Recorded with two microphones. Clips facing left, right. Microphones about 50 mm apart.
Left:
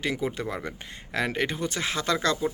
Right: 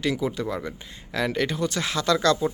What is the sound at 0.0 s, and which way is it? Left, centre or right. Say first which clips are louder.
Speech: right 3 dB; left.